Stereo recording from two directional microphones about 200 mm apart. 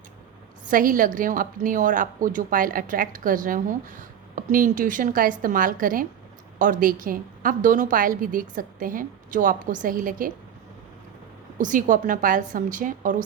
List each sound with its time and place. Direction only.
0.7 s a woman's voice: 45° right (ahead or behind)
11.5 s a woman's voice: 40° right (ahead or behind)